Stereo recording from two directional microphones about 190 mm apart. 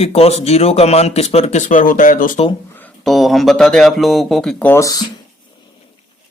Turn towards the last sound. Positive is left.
turn(degrees=15)  # may be behind; listen again after turning